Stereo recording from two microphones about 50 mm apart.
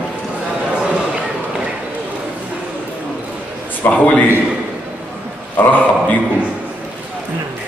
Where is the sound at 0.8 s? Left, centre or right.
Right.